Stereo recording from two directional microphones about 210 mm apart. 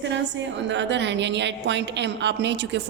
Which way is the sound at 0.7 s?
60° right (ahead or behind).